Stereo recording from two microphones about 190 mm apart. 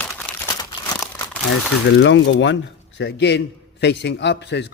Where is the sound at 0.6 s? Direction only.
20° left (ahead or behind).